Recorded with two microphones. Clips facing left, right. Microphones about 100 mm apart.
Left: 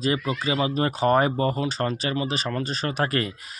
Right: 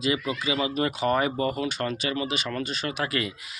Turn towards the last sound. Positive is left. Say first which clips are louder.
# left 3 dB
turn(degrees=40)  # may be behind; listen again after turning